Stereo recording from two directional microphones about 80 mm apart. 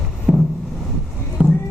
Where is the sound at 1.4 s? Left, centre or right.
Centre.